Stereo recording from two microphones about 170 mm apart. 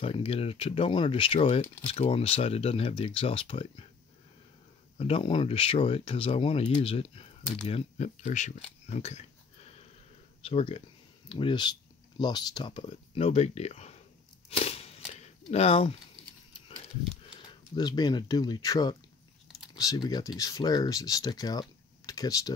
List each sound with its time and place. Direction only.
0.0 s speech: 35° left (ahead or behind)
4.9 s speech: 35° left (ahead or behind)
10.4 s speech: 35° left (ahead or behind)
14.5 s a sound: 35° left (ahead or behind)
17.3 s speech: 25° left (ahead or behind)